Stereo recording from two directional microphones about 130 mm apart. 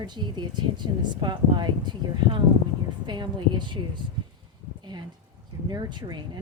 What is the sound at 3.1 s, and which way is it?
Speech, 35° right (ahead or behind).